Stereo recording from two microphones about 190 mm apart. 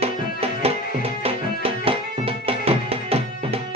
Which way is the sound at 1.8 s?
30° right (ahead or behind).